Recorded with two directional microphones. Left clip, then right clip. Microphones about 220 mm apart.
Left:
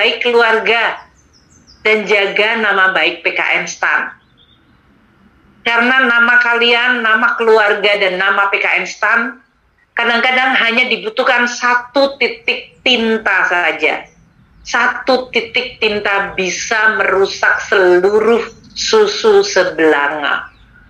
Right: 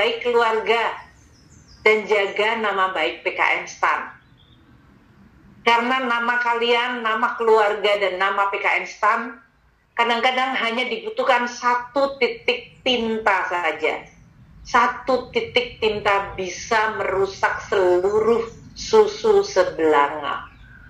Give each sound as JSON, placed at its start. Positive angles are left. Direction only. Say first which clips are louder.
{"t": 0.0, "sound": "a woman's voice", "louder": "left 7 dB", "side_deg": 55}
{"t": 5.8, "sound": "a woman's voice", "louder": "left 11 dB", "side_deg": 50}